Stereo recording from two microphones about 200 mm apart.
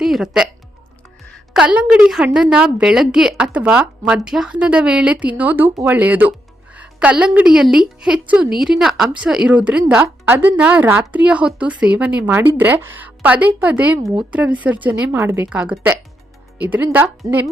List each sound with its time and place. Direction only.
0.0 s a woman's voice: centre (ahead or behind)